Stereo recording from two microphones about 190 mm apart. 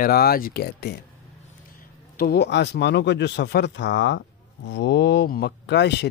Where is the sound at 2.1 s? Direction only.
55° left (ahead or behind).